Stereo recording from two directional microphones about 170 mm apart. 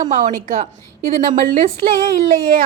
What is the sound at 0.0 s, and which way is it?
A woman's voice, 45° right (ahead or behind).